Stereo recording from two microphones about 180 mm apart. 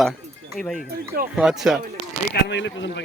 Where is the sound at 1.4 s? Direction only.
Centre (ahead or behind).